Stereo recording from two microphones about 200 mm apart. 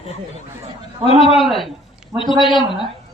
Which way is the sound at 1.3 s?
Centre (ahead or behind).